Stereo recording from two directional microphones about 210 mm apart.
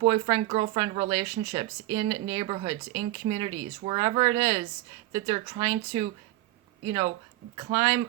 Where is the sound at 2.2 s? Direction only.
20° right (ahead or behind).